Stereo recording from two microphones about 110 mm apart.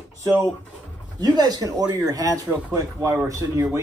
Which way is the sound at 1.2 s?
40° right (ahead or behind).